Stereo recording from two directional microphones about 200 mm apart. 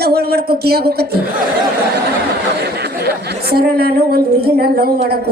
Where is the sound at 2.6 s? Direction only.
50° right (ahead or behind).